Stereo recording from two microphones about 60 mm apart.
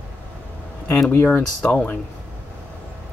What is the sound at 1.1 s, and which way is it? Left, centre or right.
Speech, left.